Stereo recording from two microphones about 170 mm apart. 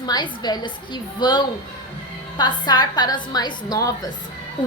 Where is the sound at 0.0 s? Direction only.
25° left (ahead or behind).